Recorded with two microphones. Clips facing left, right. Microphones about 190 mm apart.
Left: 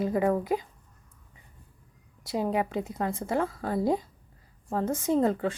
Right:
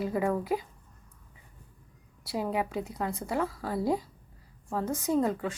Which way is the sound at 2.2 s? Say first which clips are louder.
Left 3 dB; 20° left (ahead or behind).